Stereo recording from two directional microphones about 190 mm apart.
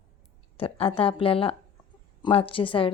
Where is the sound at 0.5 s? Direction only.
30° left (ahead or behind).